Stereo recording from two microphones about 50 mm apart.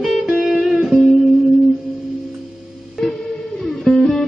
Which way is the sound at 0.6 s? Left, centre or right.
Centre.